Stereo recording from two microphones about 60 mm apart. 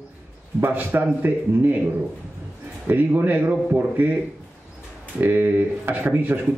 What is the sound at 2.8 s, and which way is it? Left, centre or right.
Speech, right.